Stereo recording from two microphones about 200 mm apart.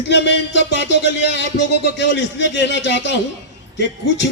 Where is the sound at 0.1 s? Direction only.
60° left (ahead or behind).